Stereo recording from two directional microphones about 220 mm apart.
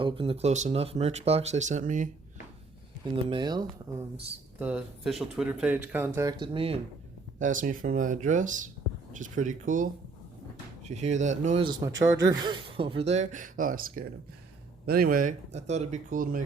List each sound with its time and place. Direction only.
0.0 s speech: 25° right (ahead or behind)
3.2 s speech: 20° right (ahead or behind)
4.6 s speech: 5° right (ahead or behind); by 6.7 s 25° right (ahead or behind)
7.3 s speech: 35° right (ahead or behind)